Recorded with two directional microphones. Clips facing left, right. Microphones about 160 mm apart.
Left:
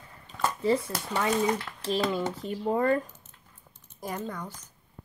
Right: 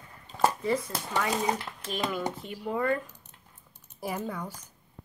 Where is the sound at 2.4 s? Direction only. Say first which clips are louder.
Left 6 dB; 35° left (ahead or behind).